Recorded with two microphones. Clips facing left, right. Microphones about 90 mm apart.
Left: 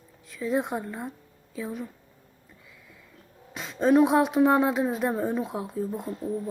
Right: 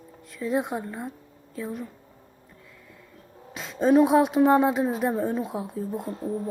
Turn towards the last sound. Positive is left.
turn(degrees=-40)  # may be behind; listen again after turning